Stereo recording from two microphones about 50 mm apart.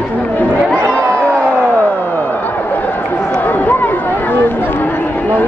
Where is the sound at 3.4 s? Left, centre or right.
Left.